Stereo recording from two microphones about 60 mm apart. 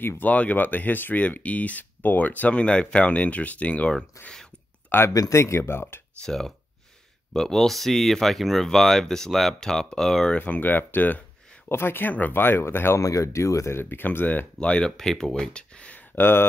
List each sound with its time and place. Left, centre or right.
0.2 s speech: left
4.8 s a sound: left
5.3 s speech: left
6.2 s speech: centre
10.3 s speech: left
13.0 s speech: left
13.7 s speech: left
14.6 s speech: centre
16.2 s speech: left